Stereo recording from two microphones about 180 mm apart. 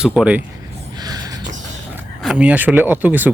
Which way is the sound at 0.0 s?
5° right (ahead or behind).